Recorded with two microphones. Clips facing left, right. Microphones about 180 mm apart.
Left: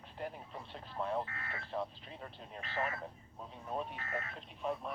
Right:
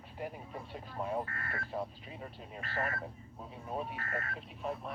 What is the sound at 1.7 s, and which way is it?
Speech, 10° right (ahead or behind).